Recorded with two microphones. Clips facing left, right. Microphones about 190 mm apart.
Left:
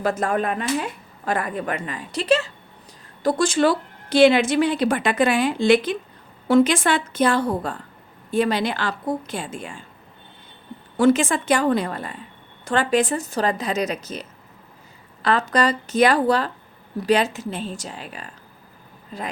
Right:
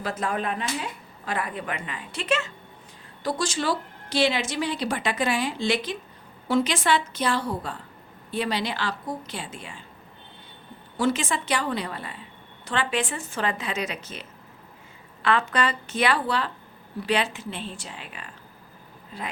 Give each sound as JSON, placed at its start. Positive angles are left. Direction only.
{"t": 0.0, "sound": "speech", "side_deg": 50}
{"t": 3.2, "sound": "a woman's voice", "side_deg": 50}
{"t": 10.9, "sound": "speech", "side_deg": 50}